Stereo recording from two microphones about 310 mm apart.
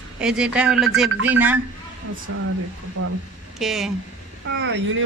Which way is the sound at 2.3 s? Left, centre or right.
Right.